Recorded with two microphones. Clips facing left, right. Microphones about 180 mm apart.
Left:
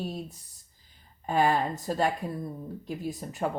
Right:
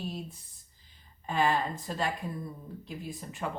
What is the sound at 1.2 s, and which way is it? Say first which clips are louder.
Speech: left 3 dB; 45° left (ahead or behind).